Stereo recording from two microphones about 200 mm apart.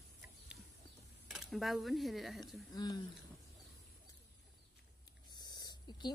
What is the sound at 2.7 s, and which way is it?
Speech, 20° left (ahead or behind).